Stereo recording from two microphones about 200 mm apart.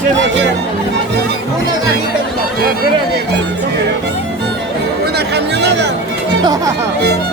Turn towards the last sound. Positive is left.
turn(degrees=-60)  # may be behind; listen again after turning